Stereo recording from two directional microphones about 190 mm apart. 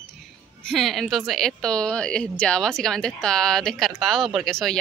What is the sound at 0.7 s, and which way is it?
A woman's voice, centre (ahead or behind).